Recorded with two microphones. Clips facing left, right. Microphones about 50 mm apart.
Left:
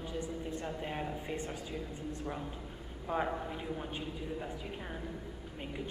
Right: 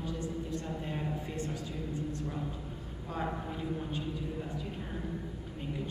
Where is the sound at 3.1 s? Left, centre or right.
Centre.